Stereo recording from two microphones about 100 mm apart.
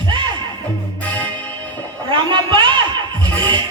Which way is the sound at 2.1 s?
55° right (ahead or behind).